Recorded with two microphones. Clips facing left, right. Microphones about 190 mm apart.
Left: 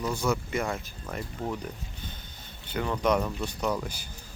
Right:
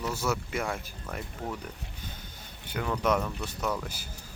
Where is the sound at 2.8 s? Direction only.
Centre (ahead or behind).